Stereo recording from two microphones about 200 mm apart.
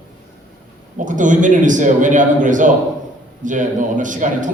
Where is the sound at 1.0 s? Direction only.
40° right (ahead or behind).